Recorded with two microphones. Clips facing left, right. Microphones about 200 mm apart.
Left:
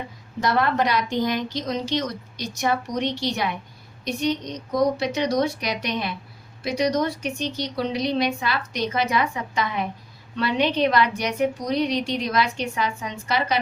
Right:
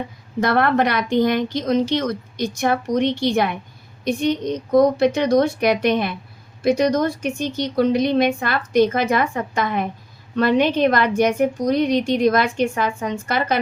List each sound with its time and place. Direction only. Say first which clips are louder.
0.3 s a woman's voice: right 4 dB; 55° right (ahead or behind)